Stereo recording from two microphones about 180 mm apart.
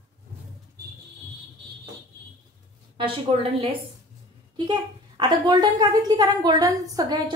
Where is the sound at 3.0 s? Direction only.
30° right (ahead or behind).